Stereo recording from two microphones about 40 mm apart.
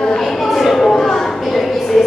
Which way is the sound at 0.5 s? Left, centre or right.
Centre.